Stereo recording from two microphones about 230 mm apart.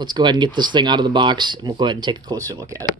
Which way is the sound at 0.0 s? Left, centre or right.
Centre.